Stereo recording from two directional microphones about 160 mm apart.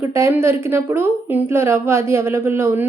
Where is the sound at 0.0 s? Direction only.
15° right (ahead or behind).